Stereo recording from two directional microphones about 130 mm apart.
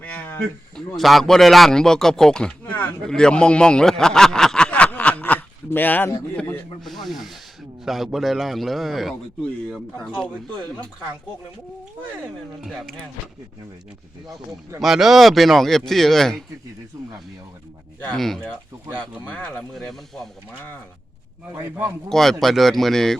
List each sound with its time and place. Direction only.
0.0 s a sound: 10° left (ahead or behind)
0.9 s speech: centre (ahead or behind)
6.8 s speech: centre (ahead or behind)
12.2 s speech: centre (ahead or behind)
14.8 s speech: centre (ahead or behind)
18.0 s speech: 5° left (ahead or behind)
21.5 s a man's voice: 20° right (ahead or behind)
22.1 s speech: 5° left (ahead or behind)